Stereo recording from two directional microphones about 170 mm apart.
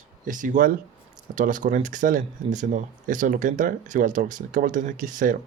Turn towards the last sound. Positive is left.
turn(degrees=-50)  # may be behind; listen again after turning